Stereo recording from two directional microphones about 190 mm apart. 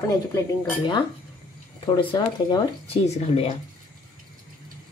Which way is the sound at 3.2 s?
35° left (ahead or behind).